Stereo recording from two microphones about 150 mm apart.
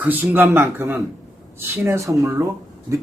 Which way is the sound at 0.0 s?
10° right (ahead or behind).